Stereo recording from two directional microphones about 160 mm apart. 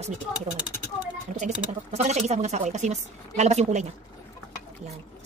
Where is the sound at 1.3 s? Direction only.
50° right (ahead or behind).